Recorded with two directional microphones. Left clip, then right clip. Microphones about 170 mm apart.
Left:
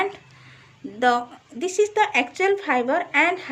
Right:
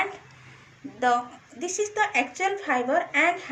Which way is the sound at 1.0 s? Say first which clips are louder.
Left 3 dB; 70° left (ahead or behind).